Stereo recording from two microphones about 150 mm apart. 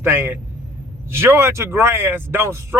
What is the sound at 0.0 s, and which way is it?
A man's voice, 15° right (ahead or behind).